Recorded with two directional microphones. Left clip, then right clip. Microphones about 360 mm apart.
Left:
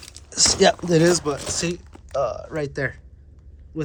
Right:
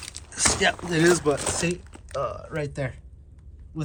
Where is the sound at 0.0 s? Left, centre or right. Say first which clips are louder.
Left 5 dB; centre.